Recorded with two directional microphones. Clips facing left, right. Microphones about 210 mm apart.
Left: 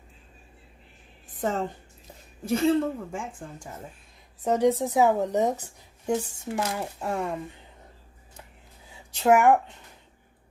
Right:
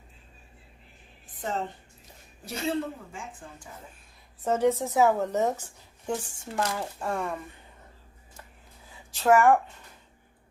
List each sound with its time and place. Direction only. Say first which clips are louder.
1.3 s a woman's voice: left 4 dB; 45° left (ahead or behind)
4.4 s speech: left 2 dB; 15° left (ahead or behind)
9.1 s speech: left 1 dB; 20° left (ahead or behind)